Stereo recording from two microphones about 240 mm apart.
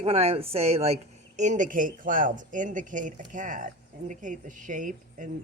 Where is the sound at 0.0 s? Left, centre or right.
Right.